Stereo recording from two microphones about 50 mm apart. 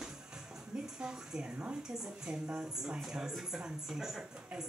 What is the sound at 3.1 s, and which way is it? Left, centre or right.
Speech, centre.